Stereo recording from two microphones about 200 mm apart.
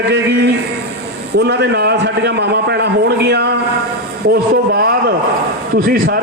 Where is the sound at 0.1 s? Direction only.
55° right (ahead or behind).